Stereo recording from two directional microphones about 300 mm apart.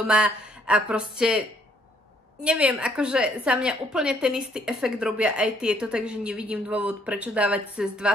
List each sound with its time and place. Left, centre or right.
0.0 s a woman's voice: centre
2.4 s a woman's voice: centre